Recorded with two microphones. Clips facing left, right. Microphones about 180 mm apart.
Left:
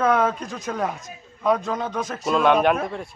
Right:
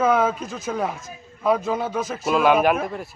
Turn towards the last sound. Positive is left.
turn(degrees=-5)  # may be behind; listen again after turning